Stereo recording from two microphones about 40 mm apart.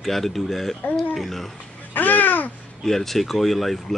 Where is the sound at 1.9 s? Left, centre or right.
Left.